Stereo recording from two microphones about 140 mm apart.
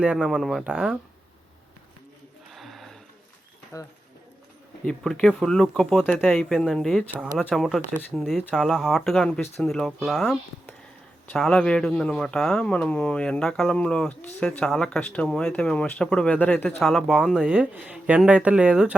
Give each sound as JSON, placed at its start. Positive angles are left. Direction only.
{"t": 0.0, "sound": "speech", "side_deg": -5}
{"t": 2.5, "sound": "a sound", "side_deg": 0}
{"t": 3.7, "sound": "speech", "side_deg": 25}
{"t": 4.9, "sound": "speech", "side_deg": 5}
{"t": 6.0, "sound": "speech", "side_deg": 15}
{"t": 6.2, "sound": "speech", "side_deg": 0}
{"t": 16.8, "sound": "speech", "side_deg": 0}